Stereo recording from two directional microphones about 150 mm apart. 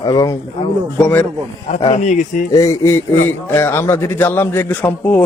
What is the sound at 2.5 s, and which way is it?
Speech, 20° left (ahead or behind).